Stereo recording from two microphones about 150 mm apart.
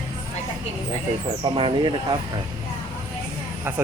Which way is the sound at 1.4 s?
35° right (ahead or behind).